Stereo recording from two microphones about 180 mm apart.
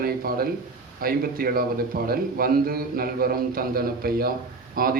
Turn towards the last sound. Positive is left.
turn(degrees=-55)  # may be behind; listen again after turning